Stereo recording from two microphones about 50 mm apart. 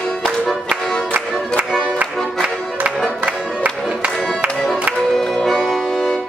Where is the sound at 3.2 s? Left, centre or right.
Right.